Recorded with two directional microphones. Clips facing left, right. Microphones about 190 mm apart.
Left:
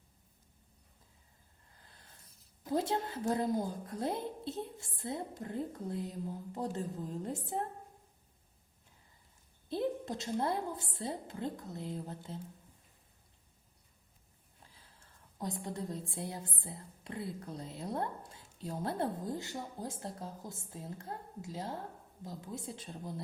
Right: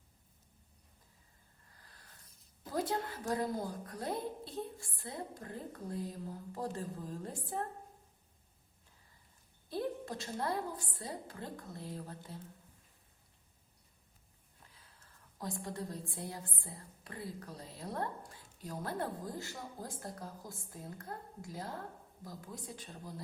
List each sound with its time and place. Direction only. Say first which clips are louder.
1.7 s a sound: left 1 dB; 25° left (ahead or behind)
2.6 s a woman's voice: left 3 dB; 25° left (ahead or behind)
9.6 s a woman's voice: left 3 dB; 20° left (ahead or behind)
14.9 s a woman's voice: left 5 dB; 25° left (ahead or behind)